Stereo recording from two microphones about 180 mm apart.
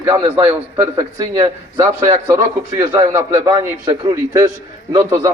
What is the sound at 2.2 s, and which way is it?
A man's voice, 15° right (ahead or behind).